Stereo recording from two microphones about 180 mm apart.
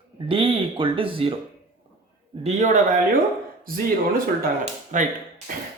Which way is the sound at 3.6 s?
55° right (ahead or behind).